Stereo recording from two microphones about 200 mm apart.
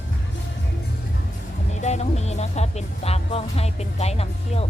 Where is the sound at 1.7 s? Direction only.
35° left (ahead or behind).